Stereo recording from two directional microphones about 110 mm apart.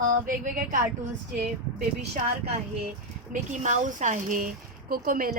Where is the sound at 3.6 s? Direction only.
90° right.